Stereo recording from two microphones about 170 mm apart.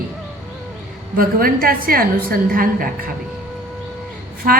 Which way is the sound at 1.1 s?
60° right (ahead or behind).